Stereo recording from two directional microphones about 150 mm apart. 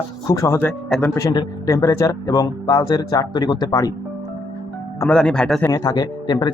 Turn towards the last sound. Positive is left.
turn(degrees=30)  # may be behind; listen again after turning